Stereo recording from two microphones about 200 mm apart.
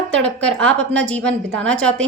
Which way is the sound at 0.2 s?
5° left (ahead or behind).